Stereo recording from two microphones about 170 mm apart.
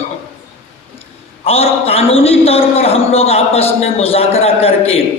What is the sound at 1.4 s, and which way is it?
A man's voice, 35° left (ahead or behind).